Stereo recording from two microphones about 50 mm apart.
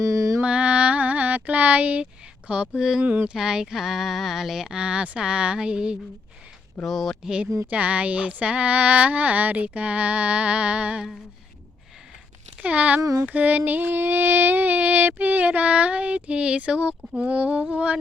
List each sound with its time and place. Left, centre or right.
0.0 s mantra: right
0.4 s mantra: right
2.5 s a sound: right
3.3 s speech: centre
5.1 s a sound: centre
6.8 s speech: centre
7.7 s a sound: right
12.5 s speech: right
13.0 s child singing: right
13.2 s female singing: right